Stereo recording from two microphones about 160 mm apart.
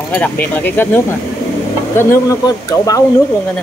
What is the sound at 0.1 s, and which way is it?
Speech, 10° left (ahead or behind).